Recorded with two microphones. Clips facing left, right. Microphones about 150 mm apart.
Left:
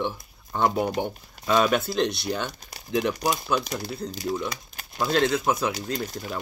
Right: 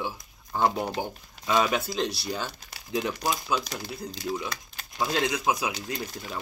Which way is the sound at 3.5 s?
45° left (ahead or behind).